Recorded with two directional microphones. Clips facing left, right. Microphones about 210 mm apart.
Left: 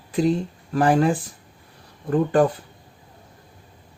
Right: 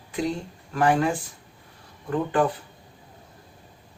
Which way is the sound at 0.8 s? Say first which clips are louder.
Left 3 dB; 35° left (ahead or behind).